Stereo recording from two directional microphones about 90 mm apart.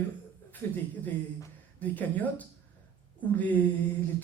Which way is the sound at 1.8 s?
20° left (ahead or behind).